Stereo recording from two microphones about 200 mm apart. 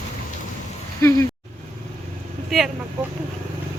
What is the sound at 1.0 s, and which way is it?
Speech, 15° left (ahead or behind).